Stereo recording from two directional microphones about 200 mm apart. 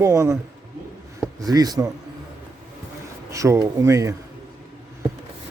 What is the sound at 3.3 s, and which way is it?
Speech, 15° right (ahead or behind).